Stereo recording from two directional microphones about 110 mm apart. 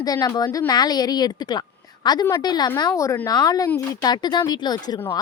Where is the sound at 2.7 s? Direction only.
30° left (ahead or behind).